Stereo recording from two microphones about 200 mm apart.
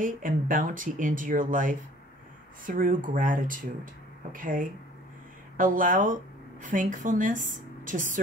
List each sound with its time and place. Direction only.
0.0 s speech: 40° right (ahead or behind)